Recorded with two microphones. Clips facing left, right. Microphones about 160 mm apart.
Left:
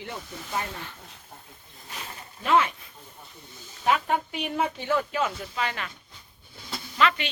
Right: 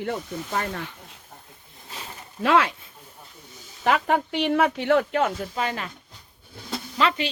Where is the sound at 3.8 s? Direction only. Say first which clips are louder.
Right 3 dB; 75° right (ahead or behind).